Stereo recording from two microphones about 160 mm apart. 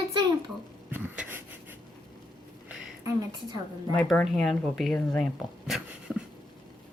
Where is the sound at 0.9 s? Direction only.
10° right (ahead or behind).